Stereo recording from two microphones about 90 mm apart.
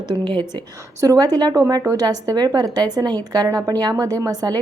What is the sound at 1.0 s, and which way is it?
A woman's voice, 45° right (ahead or behind).